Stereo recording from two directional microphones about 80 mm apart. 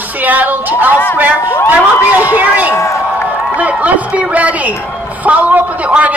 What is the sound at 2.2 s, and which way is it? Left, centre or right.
A man's voice, right.